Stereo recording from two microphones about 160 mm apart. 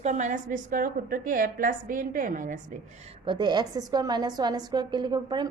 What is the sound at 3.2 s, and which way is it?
A woman's voice, 30° right (ahead or behind).